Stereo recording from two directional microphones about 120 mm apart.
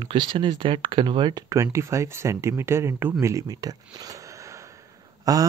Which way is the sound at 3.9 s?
30° right (ahead or behind).